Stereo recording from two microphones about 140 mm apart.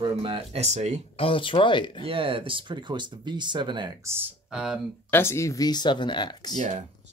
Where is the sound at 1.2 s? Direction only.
40° left (ahead or behind).